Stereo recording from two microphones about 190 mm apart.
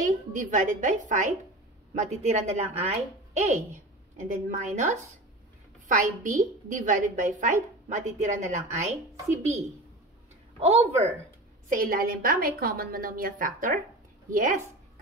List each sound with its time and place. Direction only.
0.0 s a woman's voice: 40° right (ahead or behind)
11.7 s a woman's voice: 50° right (ahead or behind)